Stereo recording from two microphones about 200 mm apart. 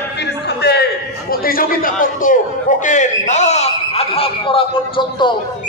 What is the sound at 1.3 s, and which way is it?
A man's voice, 45° left (ahead or behind).